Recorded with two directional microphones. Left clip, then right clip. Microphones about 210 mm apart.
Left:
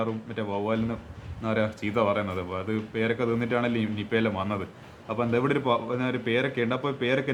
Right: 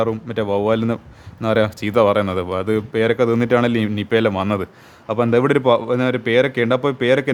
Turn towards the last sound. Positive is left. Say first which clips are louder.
# right 10 dB
turn(degrees=-50)  # may be behind; listen again after turning